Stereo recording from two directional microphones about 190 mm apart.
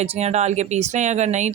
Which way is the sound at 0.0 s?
35° right (ahead or behind).